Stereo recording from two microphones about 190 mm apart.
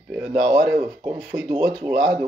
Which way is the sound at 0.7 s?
15° right (ahead or behind).